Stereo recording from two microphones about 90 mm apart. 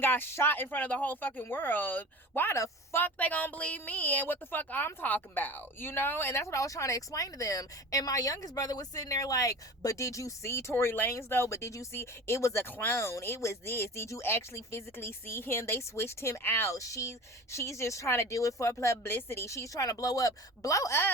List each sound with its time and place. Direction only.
0.0 s speech: 25° left (ahead or behind)